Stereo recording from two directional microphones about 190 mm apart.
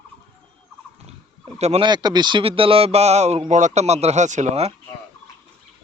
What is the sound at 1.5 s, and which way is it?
Speech, 35° right (ahead or behind).